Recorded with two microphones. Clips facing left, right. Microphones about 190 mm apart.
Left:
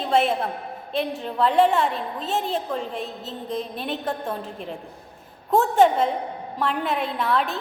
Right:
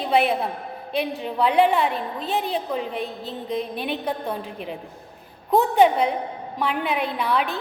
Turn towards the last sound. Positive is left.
turn(degrees=0)  # may be behind; listen again after turning